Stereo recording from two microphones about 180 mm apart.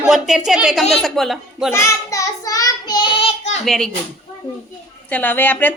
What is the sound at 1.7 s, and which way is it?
Child singing, 15° left (ahead or behind).